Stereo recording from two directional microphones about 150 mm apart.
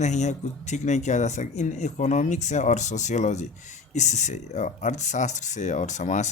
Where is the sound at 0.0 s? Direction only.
50° left (ahead or behind).